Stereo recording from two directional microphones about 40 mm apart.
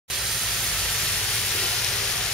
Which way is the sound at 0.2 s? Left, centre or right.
Centre.